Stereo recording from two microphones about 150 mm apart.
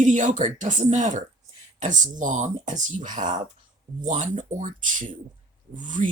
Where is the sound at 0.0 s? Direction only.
55° right (ahead or behind).